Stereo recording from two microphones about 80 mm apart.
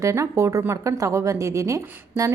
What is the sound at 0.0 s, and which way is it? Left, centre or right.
A woman's voice, right.